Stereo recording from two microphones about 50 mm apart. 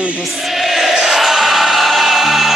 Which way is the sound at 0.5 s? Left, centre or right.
Centre.